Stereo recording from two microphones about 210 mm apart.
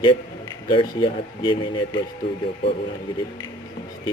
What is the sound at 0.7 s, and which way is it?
Speech, 25° left (ahead or behind).